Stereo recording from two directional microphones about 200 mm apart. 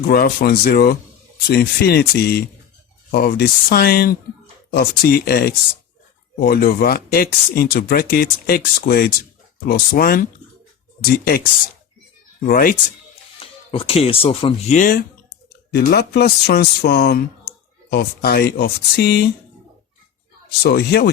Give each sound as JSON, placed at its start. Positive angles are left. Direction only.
{"t": 0.1, "sound": "speech", "side_deg": 50}
{"t": 12.5, "sound": "speech", "side_deg": 45}
{"t": 13.4, "sound": "speech", "side_deg": 30}
{"t": 15.7, "sound": "speech", "side_deg": 50}
{"t": 20.6, "sound": "speech", "side_deg": 55}